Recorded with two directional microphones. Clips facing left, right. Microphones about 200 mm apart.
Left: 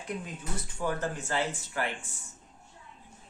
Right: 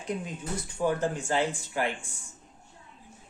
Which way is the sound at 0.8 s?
15° right (ahead or behind).